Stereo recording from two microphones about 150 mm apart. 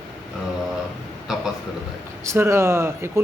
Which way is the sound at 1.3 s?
5° right (ahead or behind).